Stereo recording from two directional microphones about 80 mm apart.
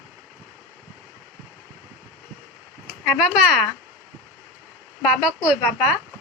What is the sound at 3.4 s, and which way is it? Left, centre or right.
Speech, centre.